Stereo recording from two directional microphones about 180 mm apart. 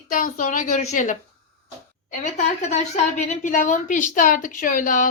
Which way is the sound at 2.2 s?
40° left (ahead or behind).